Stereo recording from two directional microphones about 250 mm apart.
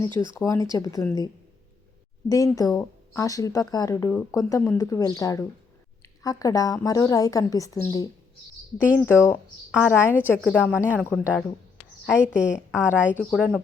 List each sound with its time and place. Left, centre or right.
0.1 s speech: centre
0.3 s speech: centre
2.3 s a woman's voice: centre
12.0 s a woman's voice: centre